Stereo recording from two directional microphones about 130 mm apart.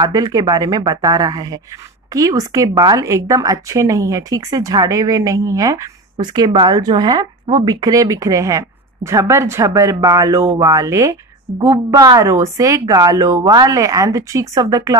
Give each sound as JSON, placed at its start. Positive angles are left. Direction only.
{"t": 0.0, "sound": "speech", "side_deg": -30}